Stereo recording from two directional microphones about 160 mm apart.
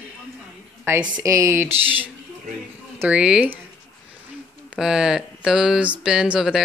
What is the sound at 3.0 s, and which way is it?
Speech, 5° right (ahead or behind).